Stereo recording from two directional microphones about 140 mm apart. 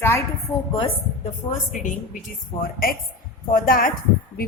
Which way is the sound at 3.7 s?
85° left.